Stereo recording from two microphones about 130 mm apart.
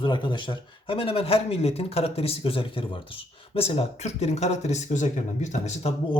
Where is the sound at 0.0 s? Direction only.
35° left (ahead or behind); by 5.9 s 65° left (ahead or behind).